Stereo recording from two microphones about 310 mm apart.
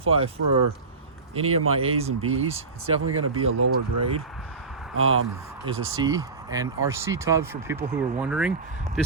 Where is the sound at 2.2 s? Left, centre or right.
Right.